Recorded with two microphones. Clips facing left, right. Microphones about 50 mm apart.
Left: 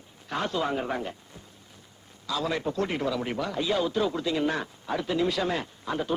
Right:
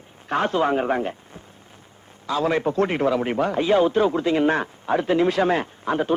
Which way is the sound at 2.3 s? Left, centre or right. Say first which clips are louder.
Right 7 dB; right.